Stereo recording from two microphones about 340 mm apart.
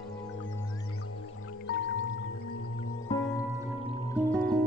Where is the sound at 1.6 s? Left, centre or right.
Left.